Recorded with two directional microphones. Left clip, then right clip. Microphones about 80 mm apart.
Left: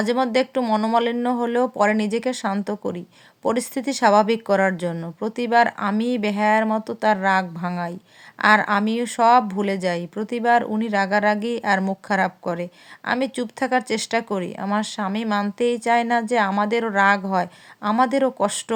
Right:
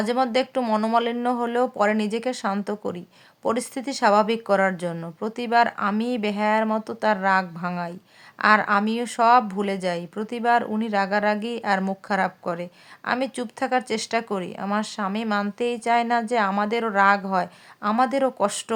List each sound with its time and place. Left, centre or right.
0.0 s speech: left
0.6 s speech: centre
0.9 s speech: left